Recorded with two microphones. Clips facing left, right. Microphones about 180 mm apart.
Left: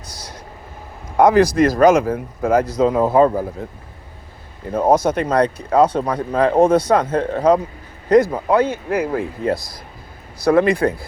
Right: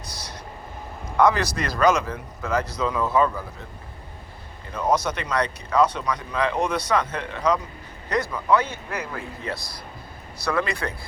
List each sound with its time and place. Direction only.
1.1 s a man's voice: 50° left (ahead or behind)
4.7 s speech: 50° left (ahead or behind)